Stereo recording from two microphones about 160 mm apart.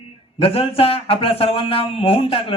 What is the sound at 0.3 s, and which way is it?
A woman's voice, 35° left (ahead or behind).